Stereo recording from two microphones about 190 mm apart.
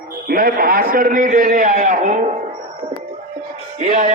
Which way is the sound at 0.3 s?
50° right (ahead or behind).